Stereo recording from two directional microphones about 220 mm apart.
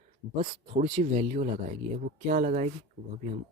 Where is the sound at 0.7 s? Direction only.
25° right (ahead or behind).